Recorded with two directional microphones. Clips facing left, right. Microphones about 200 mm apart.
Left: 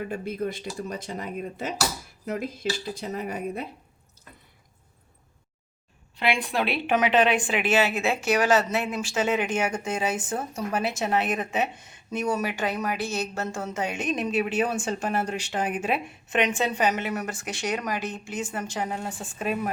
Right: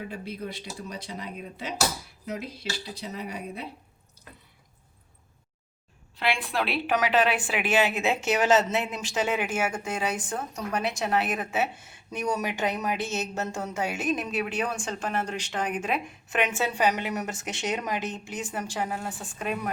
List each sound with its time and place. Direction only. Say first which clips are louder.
0.1 s speech: left 6 dB; 50° left (ahead or behind)
6.1 s a woman's voice: left 2 dB; centre (ahead or behind)
18.9 s a woman's voice: left 1 dB; centre (ahead or behind)